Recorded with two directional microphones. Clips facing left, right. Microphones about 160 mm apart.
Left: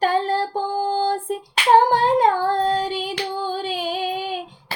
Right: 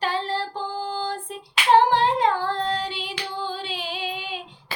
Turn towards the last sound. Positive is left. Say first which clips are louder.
# left 7 dB
turn(degrees=45)  # may be behind; listen again after turning